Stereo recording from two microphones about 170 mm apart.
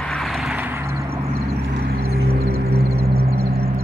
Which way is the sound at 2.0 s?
65° right (ahead or behind).